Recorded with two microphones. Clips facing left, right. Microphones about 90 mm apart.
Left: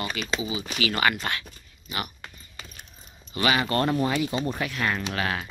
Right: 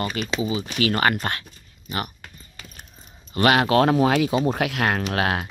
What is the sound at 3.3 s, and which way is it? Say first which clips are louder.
Speech: right 6 dB; 60° right (ahead or behind).